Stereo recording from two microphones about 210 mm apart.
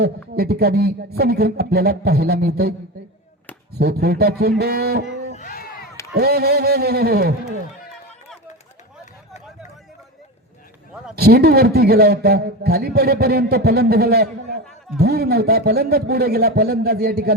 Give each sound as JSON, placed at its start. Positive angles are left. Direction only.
{"t": 0.3, "sound": "a man's voice", "side_deg": -50}
{"t": 3.8, "sound": "a man's voice", "side_deg": -50}
{"t": 5.4, "sound": "a sound", "side_deg": 40}
{"t": 6.1, "sound": "a man's voice", "side_deg": -50}
{"t": 11.1, "sound": "a man's voice", "side_deg": -50}